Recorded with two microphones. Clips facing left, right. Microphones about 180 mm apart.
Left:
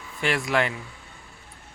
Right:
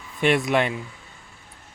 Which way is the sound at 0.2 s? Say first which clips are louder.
Right 4 dB; 20° right (ahead or behind).